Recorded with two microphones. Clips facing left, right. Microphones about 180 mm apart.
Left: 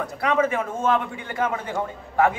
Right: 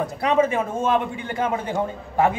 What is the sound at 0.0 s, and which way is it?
A man's voice, 20° right (ahead or behind).